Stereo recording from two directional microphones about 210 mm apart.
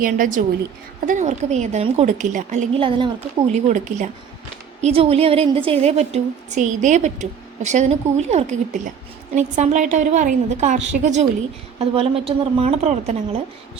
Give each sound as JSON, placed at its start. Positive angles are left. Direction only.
{"t": 0.0, "sound": "a woman's voice", "side_deg": -40}